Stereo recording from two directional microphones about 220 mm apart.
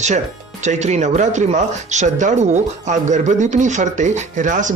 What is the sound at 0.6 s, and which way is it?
Speech, 30° right (ahead or behind).